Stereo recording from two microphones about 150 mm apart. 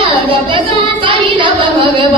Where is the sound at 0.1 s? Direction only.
35° right (ahead or behind).